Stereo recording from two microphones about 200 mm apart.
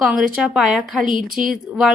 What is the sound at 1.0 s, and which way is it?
Speech, 45° right (ahead or behind).